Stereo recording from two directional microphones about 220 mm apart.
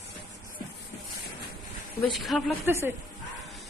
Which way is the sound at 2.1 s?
Centre (ahead or behind).